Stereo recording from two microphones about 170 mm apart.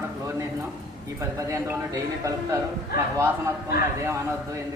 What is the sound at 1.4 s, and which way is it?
A man's voice, 15° right (ahead or behind).